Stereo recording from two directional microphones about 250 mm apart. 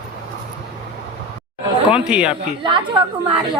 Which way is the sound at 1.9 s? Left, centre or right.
Centre.